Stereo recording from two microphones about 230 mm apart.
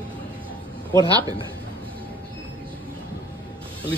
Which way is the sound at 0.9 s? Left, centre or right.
Centre.